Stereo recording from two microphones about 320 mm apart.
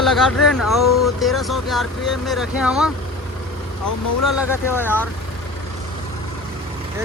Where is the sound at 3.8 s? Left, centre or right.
Left.